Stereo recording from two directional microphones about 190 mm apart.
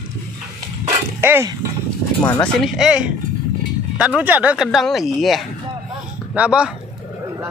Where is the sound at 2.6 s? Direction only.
5° right (ahead or behind).